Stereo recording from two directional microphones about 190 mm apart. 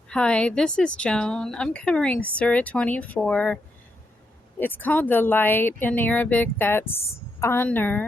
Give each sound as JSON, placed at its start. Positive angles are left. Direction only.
{"t": 0.1, "sound": "a woman's voice", "side_deg": 5}
{"t": 4.6, "sound": "speech", "side_deg": 10}